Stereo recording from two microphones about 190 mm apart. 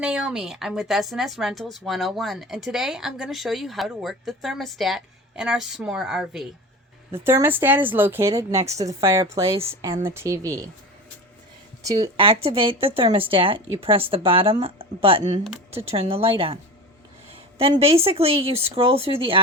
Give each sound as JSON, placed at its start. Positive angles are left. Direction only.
{"t": 0.0, "sound": "a woman's voice", "side_deg": -5}
{"t": 7.1, "sound": "speech", "side_deg": -15}
{"t": 11.9, "sound": "speech", "side_deg": -15}
{"t": 12.2, "sound": "speech", "side_deg": -30}
{"t": 17.6, "sound": "speech", "side_deg": -30}